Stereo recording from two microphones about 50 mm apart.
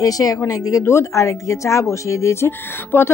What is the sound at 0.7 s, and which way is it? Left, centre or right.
Speech, left.